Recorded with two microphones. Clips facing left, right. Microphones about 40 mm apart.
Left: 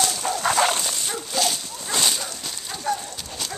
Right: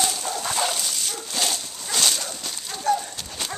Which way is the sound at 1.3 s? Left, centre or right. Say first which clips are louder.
Left 2 dB; centre.